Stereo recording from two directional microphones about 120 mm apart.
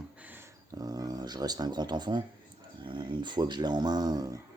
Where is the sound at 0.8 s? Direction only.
30° right (ahead or behind).